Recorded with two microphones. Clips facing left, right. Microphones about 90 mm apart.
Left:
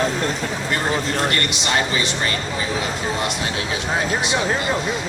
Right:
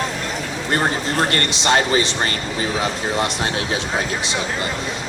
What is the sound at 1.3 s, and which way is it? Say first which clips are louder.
Speech: right 3 dB; 40° right (ahead or behind).